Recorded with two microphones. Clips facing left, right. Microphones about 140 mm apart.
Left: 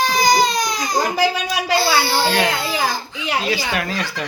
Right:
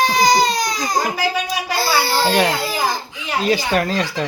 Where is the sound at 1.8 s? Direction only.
40° right (ahead or behind).